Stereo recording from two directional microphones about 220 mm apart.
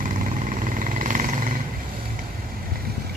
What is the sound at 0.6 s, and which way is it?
Vehicle, 35° right (ahead or behind).